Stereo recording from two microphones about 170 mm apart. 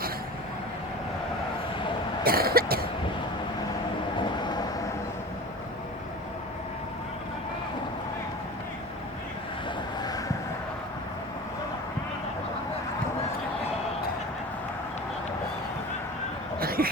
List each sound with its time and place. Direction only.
2.2 s cough: 60° right (ahead or behind)
4.2 s vehicle: 25° left (ahead or behind)
10.0 s vehicle: 20° left (ahead or behind)
16.6 s a sound: 60° right (ahead or behind)